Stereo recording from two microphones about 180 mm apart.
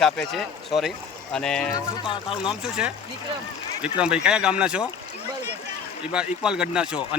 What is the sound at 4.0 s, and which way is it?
Speech, 5° right (ahead or behind).